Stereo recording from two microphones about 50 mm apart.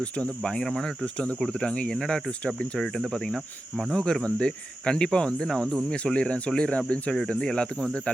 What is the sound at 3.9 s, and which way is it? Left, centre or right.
Speech, centre.